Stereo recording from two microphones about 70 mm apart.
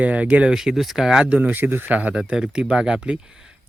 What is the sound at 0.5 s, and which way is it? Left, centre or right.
Speech, centre.